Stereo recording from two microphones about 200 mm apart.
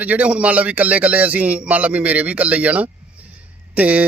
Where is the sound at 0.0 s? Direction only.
5° right (ahead or behind).